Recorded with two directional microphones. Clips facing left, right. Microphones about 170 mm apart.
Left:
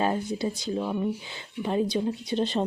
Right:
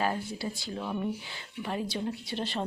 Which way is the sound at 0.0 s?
20° left (ahead or behind).